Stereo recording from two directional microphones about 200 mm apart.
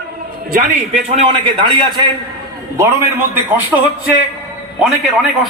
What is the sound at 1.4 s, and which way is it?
Speech, 25° right (ahead or behind).